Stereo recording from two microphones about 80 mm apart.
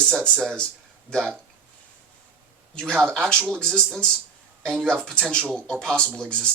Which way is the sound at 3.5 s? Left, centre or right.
Centre.